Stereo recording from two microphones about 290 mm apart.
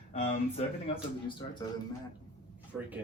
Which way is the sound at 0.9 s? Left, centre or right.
Left.